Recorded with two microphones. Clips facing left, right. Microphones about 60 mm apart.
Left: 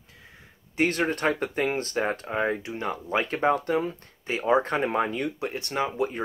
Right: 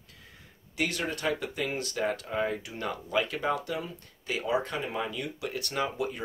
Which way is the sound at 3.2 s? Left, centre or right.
Left.